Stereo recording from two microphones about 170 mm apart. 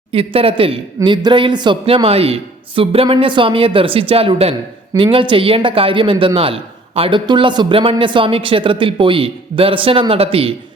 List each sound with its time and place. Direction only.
0.1 s a man's voice: 35° right (ahead or behind)